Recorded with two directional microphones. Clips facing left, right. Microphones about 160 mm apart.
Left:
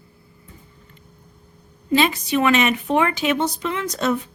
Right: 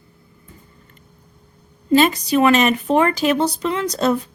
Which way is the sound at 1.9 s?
40° right (ahead or behind).